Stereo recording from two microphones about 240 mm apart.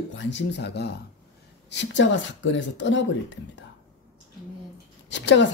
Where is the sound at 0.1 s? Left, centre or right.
Left.